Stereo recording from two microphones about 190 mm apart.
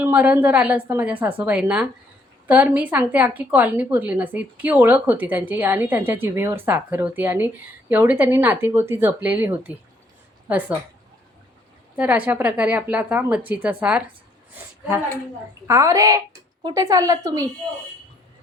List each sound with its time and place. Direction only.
0.0 s a woman's voice: 10° right (ahead or behind)
11.9 s a woman's voice: 5° right (ahead or behind)
15.6 s a woman's voice: 15° right (ahead or behind)